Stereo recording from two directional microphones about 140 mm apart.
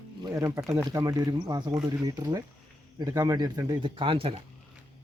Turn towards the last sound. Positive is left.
turn(degrees=-40)  # may be behind; listen again after turning